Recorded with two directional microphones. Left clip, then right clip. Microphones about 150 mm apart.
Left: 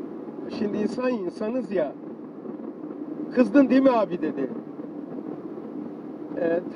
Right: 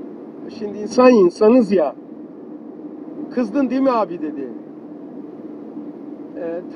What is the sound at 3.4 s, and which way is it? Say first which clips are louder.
Speech: left 1 dB; 30° right (ahead or behind).